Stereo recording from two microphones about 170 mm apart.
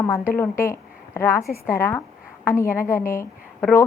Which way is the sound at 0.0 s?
15° left (ahead or behind).